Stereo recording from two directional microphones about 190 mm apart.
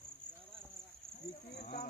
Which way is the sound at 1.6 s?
35° left (ahead or behind).